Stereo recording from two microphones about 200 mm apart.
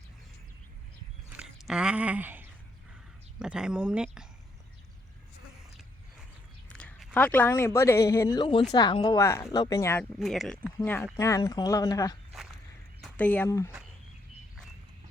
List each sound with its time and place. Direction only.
1.3 s a sound: 5° right (ahead or behind)
3.3 s speech: 5° right (ahead or behind)
6.7 s speech: 5° left (ahead or behind)
10.2 s speech: centre (ahead or behind); by 12.1 s 20° left (ahead or behind)
13.0 s speech: 5° left (ahead or behind)